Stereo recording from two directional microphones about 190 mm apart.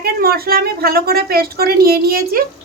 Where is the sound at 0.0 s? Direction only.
55° right (ahead or behind).